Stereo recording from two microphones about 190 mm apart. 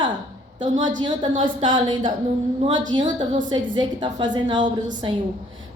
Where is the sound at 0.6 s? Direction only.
25° right (ahead or behind).